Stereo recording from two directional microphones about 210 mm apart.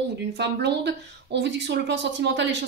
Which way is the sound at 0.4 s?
55° right (ahead or behind).